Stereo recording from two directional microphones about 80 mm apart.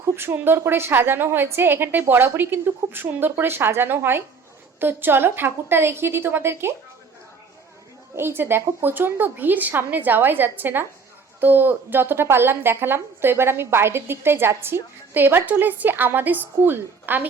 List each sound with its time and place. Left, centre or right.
0.2 s a woman's voice: right
8.1 s a woman's voice: right